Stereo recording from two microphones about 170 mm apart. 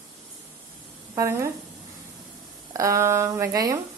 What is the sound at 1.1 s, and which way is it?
Speech, 20° right (ahead or behind).